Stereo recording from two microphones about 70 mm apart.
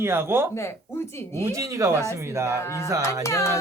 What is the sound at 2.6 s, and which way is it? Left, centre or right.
Speech, left.